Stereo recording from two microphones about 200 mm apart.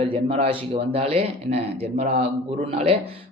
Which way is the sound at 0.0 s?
30° right (ahead or behind).